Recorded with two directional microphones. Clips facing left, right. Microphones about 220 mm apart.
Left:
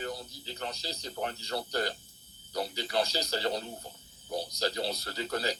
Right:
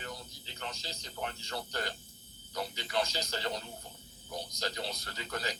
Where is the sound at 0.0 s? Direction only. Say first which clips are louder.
Left 7 dB; 35° left (ahead or behind).